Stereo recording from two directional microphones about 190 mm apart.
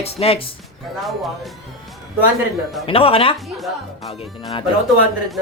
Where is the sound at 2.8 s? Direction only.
30° left (ahead or behind).